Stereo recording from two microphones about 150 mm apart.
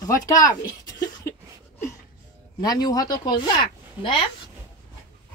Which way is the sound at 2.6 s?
25° left (ahead or behind).